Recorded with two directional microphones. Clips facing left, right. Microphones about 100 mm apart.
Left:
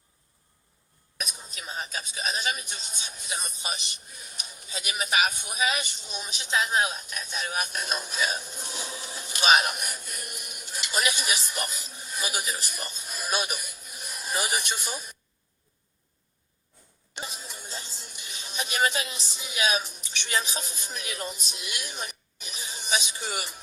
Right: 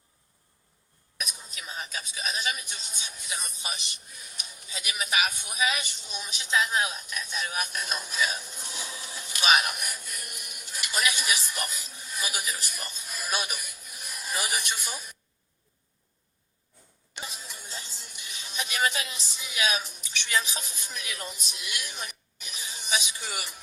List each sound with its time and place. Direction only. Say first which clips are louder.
1.2 s speech: left 1 dB; 25° left (ahead or behind)
17.2 s music: left 2 dB; 25° left (ahead or behind)